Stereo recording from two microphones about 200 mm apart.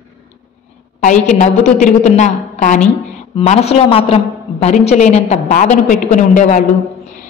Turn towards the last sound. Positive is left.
turn(degrees=40)  # may be behind; listen again after turning